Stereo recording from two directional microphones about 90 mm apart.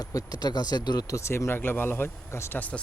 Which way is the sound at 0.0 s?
45° left (ahead or behind).